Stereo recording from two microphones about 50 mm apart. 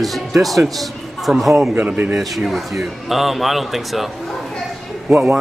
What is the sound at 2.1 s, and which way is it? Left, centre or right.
A man's voice, centre.